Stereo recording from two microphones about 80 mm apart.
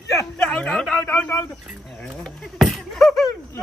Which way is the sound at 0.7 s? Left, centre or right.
Centre.